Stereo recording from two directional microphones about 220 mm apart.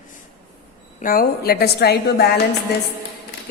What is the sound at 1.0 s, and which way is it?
Mantra, 40° left (ahead or behind).